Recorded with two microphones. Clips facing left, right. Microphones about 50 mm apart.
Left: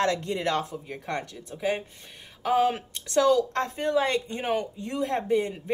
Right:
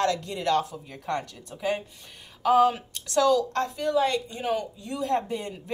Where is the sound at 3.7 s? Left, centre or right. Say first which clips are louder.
Even; left.